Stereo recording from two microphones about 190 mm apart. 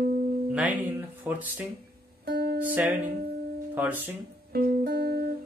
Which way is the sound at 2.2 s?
55° right (ahead or behind).